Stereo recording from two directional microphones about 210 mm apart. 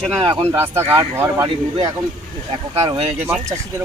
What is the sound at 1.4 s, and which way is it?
Speech, 25° right (ahead or behind).